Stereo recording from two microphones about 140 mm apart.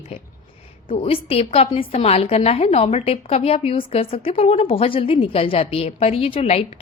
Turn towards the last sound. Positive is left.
turn(degrees=45)  # may be behind; listen again after turning